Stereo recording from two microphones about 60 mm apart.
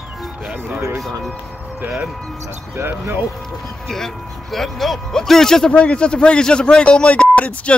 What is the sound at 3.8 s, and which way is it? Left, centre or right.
Speech, centre.